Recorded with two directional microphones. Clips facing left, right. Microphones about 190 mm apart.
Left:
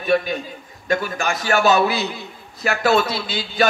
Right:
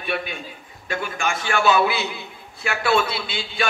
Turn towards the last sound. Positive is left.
turn(degrees=40)  # may be behind; listen again after turning